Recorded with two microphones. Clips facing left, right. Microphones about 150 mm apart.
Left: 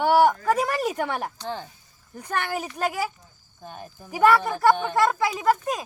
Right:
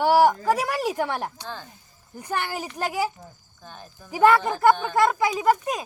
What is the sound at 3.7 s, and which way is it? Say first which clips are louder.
Speech: left 1 dB; 15° left (ahead or behind).